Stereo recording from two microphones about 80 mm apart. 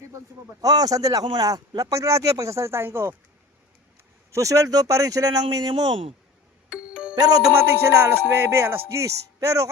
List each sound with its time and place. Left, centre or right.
0.6 s speech: right
4.3 s speech: right
6.7 s music: centre
7.5 s speech: right